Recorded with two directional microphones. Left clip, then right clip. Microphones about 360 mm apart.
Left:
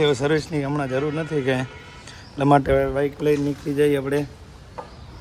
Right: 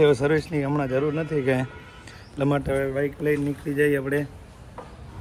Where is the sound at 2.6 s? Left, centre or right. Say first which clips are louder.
Left 6 dB; left.